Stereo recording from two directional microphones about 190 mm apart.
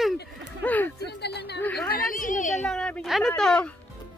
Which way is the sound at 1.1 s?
60° left (ahead or behind).